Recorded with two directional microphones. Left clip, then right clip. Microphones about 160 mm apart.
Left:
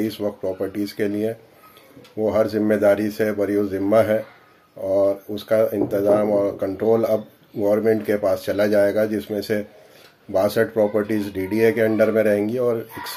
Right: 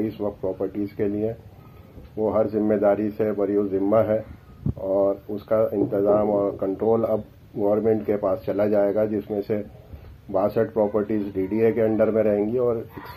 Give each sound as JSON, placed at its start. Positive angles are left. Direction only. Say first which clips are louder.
{"t": 0.0, "sound": "speech", "louder": "left 2 dB", "side_deg": 25}